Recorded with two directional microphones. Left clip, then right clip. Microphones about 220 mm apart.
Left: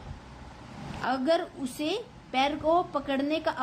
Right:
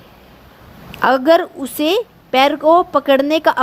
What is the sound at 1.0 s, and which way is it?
A woman's voice, 45° right (ahead or behind).